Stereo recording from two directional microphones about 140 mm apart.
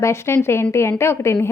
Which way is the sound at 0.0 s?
20° left (ahead or behind).